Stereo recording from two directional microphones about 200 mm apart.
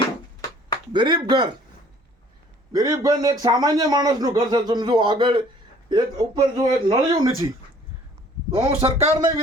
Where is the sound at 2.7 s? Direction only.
15° right (ahead or behind).